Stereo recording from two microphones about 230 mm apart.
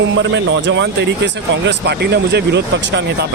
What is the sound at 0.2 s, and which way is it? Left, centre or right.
Speech, right.